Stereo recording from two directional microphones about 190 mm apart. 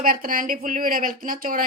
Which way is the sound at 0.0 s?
50° right (ahead or behind).